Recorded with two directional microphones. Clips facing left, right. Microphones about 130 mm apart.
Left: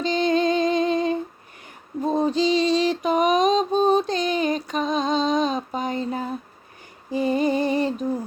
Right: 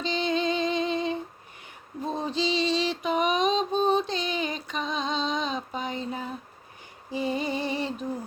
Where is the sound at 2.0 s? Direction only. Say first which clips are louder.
Left 8 dB; 45° left (ahead or behind).